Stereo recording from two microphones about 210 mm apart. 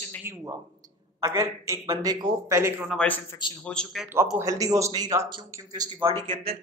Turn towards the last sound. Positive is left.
turn(degrees=-25)  # may be behind; listen again after turning